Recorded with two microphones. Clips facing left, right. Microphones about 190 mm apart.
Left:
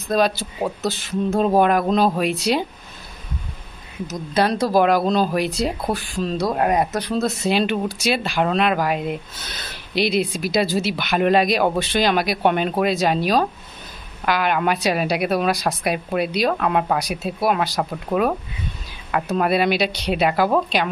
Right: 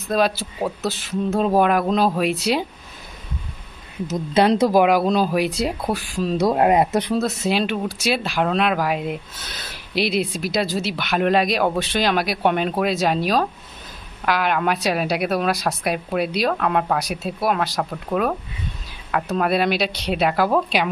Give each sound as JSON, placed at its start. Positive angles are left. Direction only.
{"t": 0.1, "sound": "speech", "side_deg": -5}
{"t": 4.0, "sound": "speech", "side_deg": -25}
{"t": 6.3, "sound": "speech", "side_deg": -20}
{"t": 7.1, "sound": "speech", "side_deg": -5}